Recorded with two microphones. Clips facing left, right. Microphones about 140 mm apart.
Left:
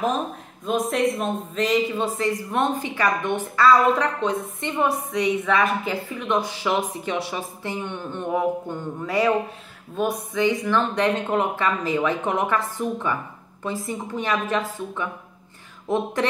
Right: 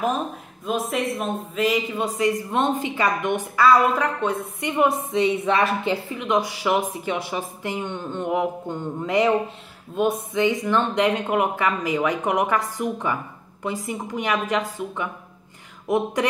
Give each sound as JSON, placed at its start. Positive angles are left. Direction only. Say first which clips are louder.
{"t": 0.7, "sound": "speech", "louder": "left 3 dB", "side_deg": 0}
{"t": 6.1, "sound": "a woman's voice", "louder": "right 1 dB", "side_deg": -15}